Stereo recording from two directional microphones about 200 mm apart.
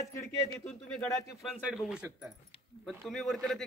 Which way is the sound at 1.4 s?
5° right (ahead or behind).